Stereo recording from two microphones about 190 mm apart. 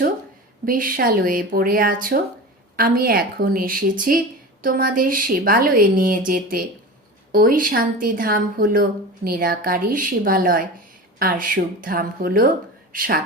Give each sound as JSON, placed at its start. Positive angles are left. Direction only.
{"t": 0.6, "sound": "speech", "side_deg": -45}